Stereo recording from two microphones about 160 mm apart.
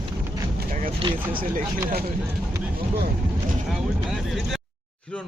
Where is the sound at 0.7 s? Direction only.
55° right (ahead or behind).